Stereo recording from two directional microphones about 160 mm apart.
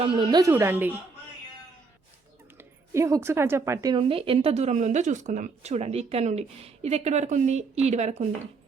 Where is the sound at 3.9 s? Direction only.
35° right (ahead or behind).